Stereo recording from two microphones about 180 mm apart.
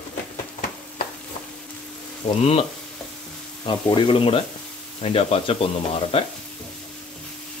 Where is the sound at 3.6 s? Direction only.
25° left (ahead or behind).